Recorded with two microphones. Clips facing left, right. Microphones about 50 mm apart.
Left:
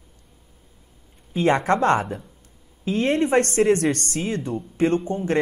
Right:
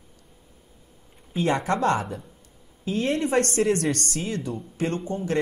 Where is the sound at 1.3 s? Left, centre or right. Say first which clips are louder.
Left 4 dB; left.